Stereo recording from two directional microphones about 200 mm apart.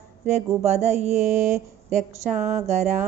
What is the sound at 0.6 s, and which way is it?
Speech, 35° right (ahead or behind).